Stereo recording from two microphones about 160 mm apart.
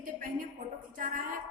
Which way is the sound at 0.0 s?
55° right (ahead or behind).